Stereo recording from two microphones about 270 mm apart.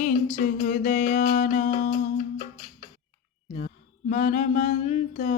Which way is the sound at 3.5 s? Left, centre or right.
Left.